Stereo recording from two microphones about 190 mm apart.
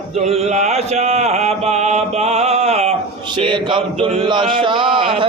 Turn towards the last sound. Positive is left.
turn(degrees=-25)  # may be behind; listen again after turning